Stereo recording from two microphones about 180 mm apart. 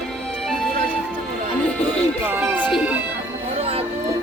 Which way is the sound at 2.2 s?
10° right (ahead or behind).